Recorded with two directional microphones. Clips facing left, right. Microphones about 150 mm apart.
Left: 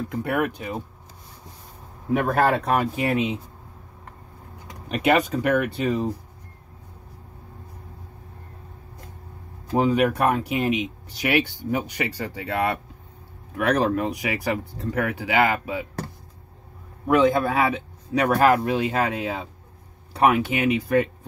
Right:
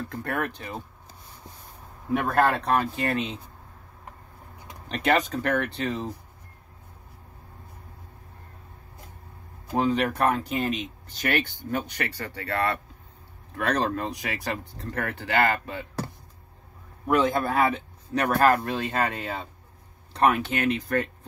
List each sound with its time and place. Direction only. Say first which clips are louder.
0.1 s speech: left 7 dB; 10° left (ahead or behind)
2.2 s speech: left 1 dB; 5° left (ahead or behind)
4.8 s speech: left 4 dB; 10° left (ahead or behind)
9.8 s speech: left 4 dB; 10° left (ahead or behind)
17.1 s speech: left 4 dB; 5° left (ahead or behind)
20.1 s a sound: left 3 dB; 10° left (ahead or behind)
20.4 s speech: left 4 dB; 10° left (ahead or behind)